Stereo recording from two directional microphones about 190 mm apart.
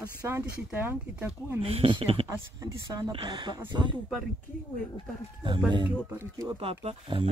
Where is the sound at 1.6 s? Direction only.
30° right (ahead or behind).